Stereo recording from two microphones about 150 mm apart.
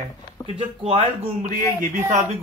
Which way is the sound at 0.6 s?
40° right (ahead or behind).